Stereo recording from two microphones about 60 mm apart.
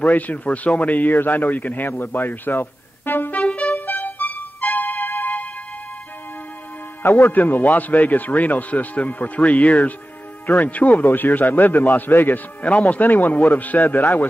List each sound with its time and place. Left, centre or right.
0.0 s speech: left
3.7 s music: left
7.0 s a man's voice: left
12.6 s speech: left